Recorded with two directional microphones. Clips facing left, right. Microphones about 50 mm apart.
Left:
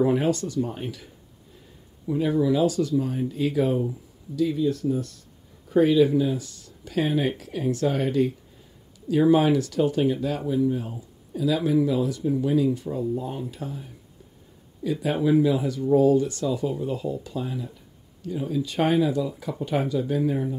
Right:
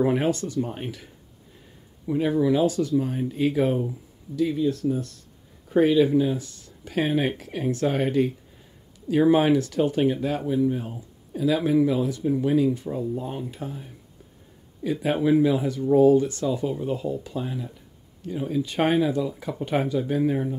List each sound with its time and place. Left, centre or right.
0.0 s speech: right
2.1 s speech: right